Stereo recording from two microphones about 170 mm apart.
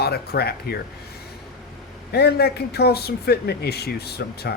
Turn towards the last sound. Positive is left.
turn(degrees=70)  # may be behind; listen again after turning